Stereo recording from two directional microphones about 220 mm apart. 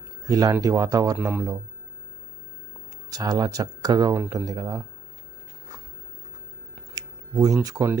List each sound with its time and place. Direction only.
0.3 s speech: 15° right (ahead or behind)
3.1 s speech: 20° right (ahead or behind)
6.9 s speech: 15° right (ahead or behind)